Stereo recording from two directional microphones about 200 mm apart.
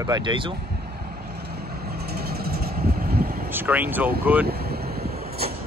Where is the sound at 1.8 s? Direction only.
50° right (ahead or behind).